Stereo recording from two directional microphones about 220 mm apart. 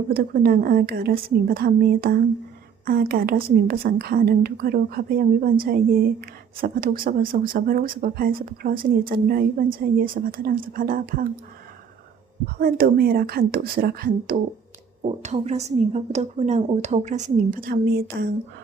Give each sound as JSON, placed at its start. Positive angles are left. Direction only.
{"t": 0.1, "sound": "a woman's voice", "side_deg": -40}
{"t": 12.5, "sound": "a woman's voice", "side_deg": -40}
{"t": 15.0, "sound": "a woman's voice", "side_deg": -30}